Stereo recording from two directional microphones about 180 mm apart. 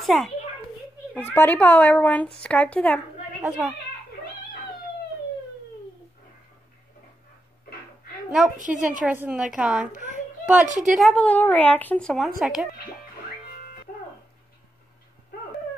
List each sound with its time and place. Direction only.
0.0 s a child's voice: centre (ahead or behind)
3.4 s a woman's voice: 5° right (ahead or behind)
8.7 s a woman's voice: 5° right (ahead or behind)
10.0 s a sound: 10° right (ahead or behind)
10.7 s a woman's voice: 45° right (ahead or behind)
11.0 s a woman's voice: 5° left (ahead or behind)